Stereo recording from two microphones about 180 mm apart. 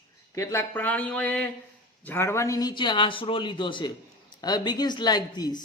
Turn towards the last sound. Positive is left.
turn(degrees=25)  # may be behind; listen again after turning